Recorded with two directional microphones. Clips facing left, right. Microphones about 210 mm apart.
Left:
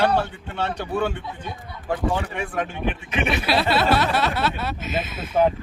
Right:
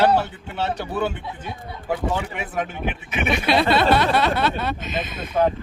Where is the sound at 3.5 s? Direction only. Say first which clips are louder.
Right 4 dB; 5° left (ahead or behind).